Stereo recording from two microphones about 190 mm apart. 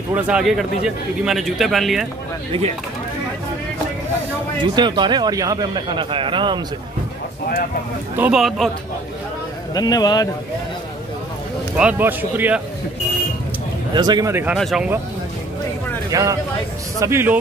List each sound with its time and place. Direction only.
0.1 s a man's voice: 5° right (ahead or behind)
4.7 s a man's voice: 25° right (ahead or behind)
8.2 s a man's voice: centre (ahead or behind)
9.8 s a man's voice: 20° left (ahead or behind)
11.7 s speech: 5° right (ahead or behind)
13.9 s speech: 20° right (ahead or behind)
14.6 s a man's voice: centre (ahead or behind)
16.1 s speech: 15° right (ahead or behind)